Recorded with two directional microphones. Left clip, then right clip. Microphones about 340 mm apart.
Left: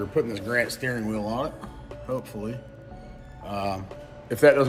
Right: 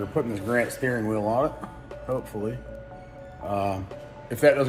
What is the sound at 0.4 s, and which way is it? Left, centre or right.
Speech, centre.